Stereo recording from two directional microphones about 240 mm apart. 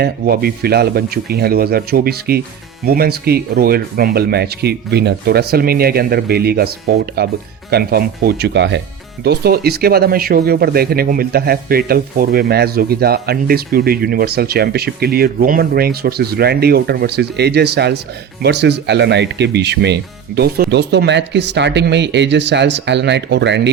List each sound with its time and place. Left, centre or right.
0.0 s speech: right